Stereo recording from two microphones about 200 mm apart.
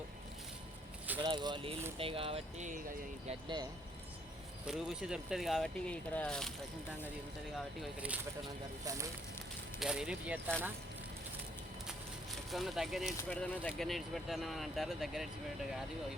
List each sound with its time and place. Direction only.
1.2 s speech: 20° right (ahead or behind); by 2.8 s 35° right (ahead or behind)
3.2 s speech: 20° right (ahead or behind)
4.6 s speech: 5° right (ahead or behind)
7.8 s speech: 5° right (ahead or behind)
9.8 s speech: 5° right (ahead or behind)
12.5 s speech: centre (ahead or behind)